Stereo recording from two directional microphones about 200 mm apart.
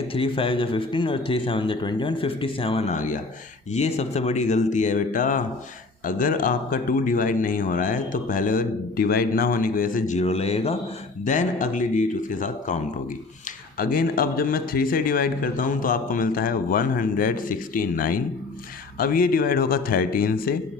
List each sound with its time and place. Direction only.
0.1 s a man's voice: 25° left (ahead or behind); by 20.6 s 45° left (ahead or behind)